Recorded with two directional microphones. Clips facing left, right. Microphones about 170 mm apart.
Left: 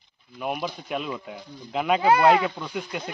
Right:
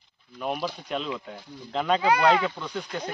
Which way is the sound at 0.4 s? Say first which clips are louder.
Even; 5° left (ahead or behind).